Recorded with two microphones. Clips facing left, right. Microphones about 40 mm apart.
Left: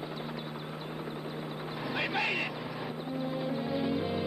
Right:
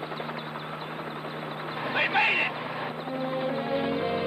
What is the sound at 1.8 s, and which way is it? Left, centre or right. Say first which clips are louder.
Vehicle: right 8 dB; right.